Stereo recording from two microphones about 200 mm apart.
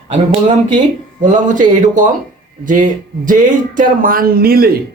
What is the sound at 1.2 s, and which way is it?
Speech, 40° right (ahead or behind).